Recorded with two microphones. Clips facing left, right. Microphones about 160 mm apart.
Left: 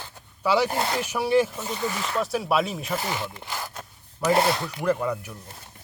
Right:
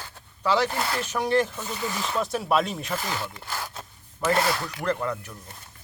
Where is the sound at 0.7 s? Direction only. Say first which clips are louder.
Left 2 dB; 25° left (ahead or behind).